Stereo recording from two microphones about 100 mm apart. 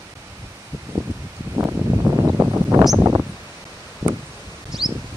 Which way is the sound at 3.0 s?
25° right (ahead or behind).